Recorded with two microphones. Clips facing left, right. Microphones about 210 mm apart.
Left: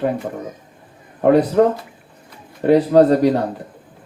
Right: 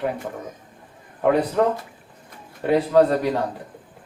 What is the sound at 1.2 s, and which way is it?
Speech, 45° left (ahead or behind).